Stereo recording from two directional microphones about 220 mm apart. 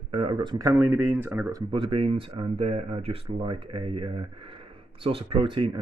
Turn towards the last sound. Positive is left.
turn(degrees=-25)  # may be behind; listen again after turning